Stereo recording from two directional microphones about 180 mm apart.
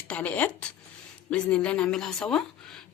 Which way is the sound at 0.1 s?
10° left (ahead or behind).